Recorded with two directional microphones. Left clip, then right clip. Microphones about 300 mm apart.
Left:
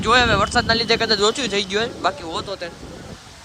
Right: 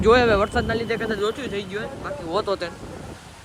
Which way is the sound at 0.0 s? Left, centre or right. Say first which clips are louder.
Left 1 dB; centre.